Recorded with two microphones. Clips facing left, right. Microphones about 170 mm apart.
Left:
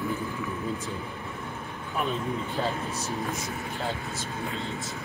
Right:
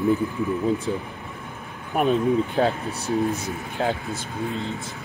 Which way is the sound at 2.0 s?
65° right (ahead or behind).